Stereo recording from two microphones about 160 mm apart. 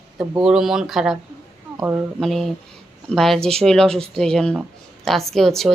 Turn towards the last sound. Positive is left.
turn(degrees=0)  # may be behind; listen again after turning